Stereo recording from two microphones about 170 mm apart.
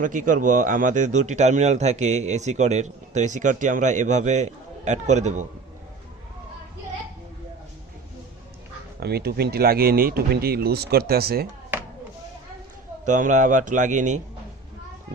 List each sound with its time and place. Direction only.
0.0 s speech: 50° right (ahead or behind)
9.0 s speech: 70° right (ahead or behind)
13.1 s speech: 50° right (ahead or behind)